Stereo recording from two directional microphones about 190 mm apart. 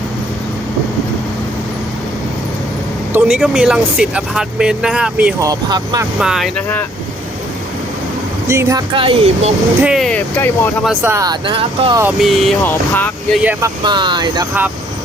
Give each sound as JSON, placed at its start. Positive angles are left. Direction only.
{"t": 3.1, "sound": "speech", "side_deg": -5}
{"t": 5.4, "sound": "speech", "side_deg": -20}
{"t": 6.1, "sound": "speech", "side_deg": -5}
{"t": 8.4, "sound": "speech", "side_deg": -15}
{"t": 9.8, "sound": "speech", "side_deg": 0}
{"t": 11.0, "sound": "speech", "side_deg": -15}
{"t": 12.2, "sound": "speech", "side_deg": 0}
{"t": 13.4, "sound": "speech", "side_deg": -10}
{"t": 13.8, "sound": "speech", "side_deg": -25}